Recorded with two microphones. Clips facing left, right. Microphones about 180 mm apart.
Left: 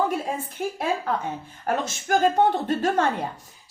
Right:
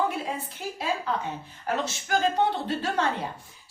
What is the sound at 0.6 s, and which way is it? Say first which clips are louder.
A woman's voice: left 4 dB; 50° left (ahead or behind).